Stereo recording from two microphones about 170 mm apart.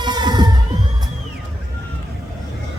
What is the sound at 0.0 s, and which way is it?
Music, 25° right (ahead or behind).